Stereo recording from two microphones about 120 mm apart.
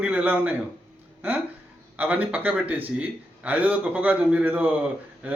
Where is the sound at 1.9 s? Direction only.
15° right (ahead or behind).